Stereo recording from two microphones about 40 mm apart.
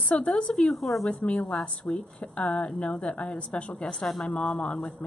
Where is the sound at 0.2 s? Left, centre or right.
Left.